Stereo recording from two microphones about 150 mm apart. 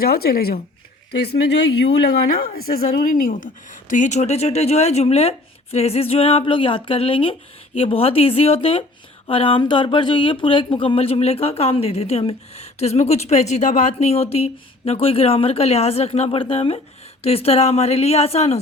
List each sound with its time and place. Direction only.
0.0 s speech: 90° left; by 18.6 s 45° left (ahead or behind)